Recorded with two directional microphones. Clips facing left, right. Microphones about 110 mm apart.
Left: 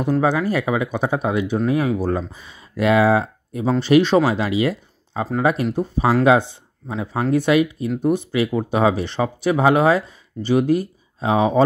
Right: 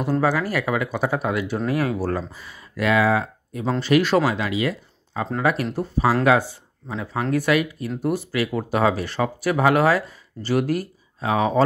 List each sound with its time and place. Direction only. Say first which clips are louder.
0.2 s speech: left 3 dB; 20° left (ahead or behind)